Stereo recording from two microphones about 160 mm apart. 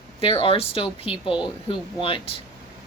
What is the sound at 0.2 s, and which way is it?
Speech, 35° left (ahead or behind).